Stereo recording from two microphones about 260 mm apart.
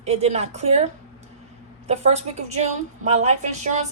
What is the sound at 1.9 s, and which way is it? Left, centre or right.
A woman's voice, right.